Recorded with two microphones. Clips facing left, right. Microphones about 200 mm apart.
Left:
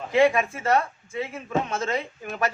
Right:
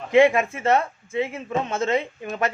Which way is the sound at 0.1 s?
25° right (ahead or behind).